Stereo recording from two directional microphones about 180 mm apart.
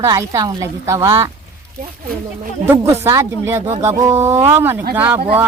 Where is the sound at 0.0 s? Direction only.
20° right (ahead or behind).